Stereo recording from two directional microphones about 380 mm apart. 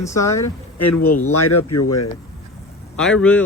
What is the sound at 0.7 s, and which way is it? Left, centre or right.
A man's voice, left.